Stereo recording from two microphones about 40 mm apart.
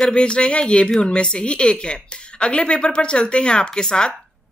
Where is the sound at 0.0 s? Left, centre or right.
Left.